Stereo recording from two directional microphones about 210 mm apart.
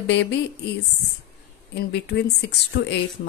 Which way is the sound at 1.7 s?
50° left (ahead or behind).